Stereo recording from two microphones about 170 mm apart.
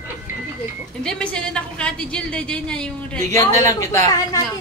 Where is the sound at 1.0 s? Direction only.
5° left (ahead or behind).